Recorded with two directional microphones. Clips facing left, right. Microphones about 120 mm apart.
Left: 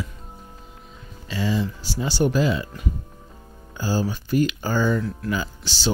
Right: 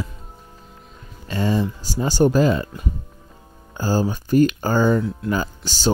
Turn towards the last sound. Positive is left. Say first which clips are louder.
# right 4 dB
turn(degrees=-45)  # may be behind; listen again after turning